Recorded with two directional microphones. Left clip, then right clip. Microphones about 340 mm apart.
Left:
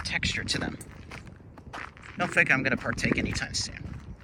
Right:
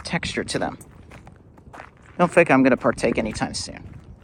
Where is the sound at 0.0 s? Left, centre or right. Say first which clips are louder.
Right 3 dB; centre.